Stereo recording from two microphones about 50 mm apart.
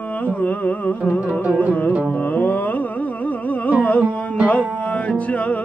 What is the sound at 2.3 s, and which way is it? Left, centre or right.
Carnatic music, left.